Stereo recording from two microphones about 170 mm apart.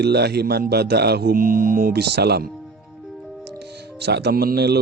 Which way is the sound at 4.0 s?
80° right.